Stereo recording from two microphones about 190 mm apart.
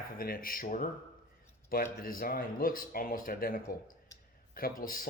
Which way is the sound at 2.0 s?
50° left (ahead or behind).